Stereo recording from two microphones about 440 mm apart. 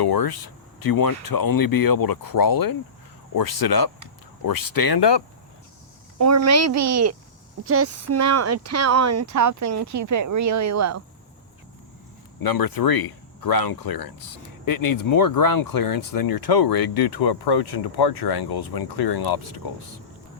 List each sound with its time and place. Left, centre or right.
0.0 s speech: left
6.1 s speech: right
12.4 s speech: left